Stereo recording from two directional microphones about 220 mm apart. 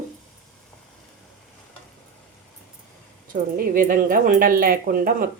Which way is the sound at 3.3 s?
40° right (ahead or behind).